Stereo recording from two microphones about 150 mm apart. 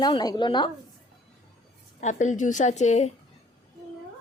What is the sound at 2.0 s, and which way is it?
A woman's voice, 55° left (ahead or behind).